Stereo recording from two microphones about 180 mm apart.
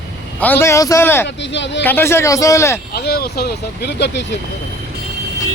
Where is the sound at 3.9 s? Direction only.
75° left (ahead or behind).